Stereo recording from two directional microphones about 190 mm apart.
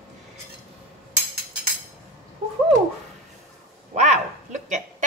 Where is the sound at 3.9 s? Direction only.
35° right (ahead or behind).